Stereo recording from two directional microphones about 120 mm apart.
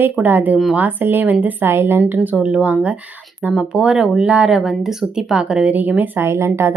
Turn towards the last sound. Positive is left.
turn(degrees=-20)  # may be behind; listen again after turning